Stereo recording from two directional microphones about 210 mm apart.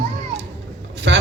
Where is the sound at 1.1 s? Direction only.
55° right (ahead or behind).